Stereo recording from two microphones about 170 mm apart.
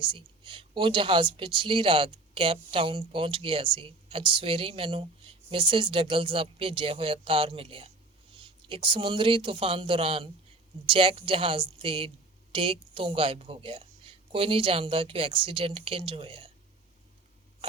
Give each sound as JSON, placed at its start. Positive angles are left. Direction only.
{"t": 0.0, "sound": "speech", "side_deg": -30}